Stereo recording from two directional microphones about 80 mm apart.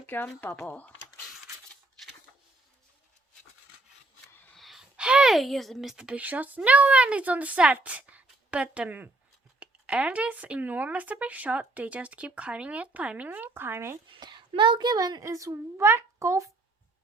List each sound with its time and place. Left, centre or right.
0.0 s speech: left
4.5 s a sound: centre
5.3 s a woman's voice: centre
6.2 s speech: right
14.1 s a woman's voice: right